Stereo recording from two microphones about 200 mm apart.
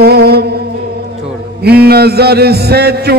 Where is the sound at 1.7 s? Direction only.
50° right (ahead or behind).